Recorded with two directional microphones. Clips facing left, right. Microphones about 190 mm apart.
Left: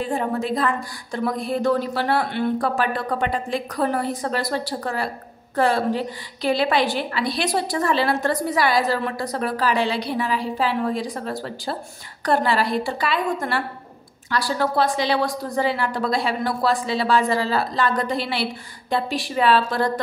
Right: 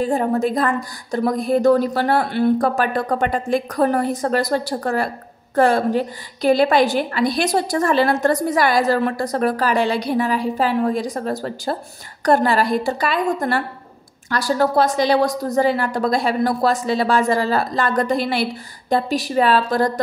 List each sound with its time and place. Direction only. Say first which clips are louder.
0.0 s a woman's voice: right 5 dB; 40° right (ahead or behind)